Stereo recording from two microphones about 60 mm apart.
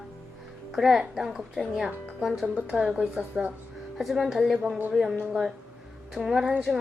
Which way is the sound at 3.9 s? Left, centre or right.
Centre.